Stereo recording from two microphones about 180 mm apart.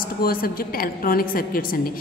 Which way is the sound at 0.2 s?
55° left (ahead or behind).